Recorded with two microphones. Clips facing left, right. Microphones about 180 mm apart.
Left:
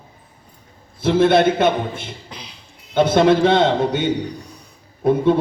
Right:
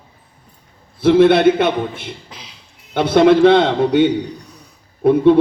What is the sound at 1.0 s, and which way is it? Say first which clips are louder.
A man's voice: right 4 dB; 65° right (ahead or behind).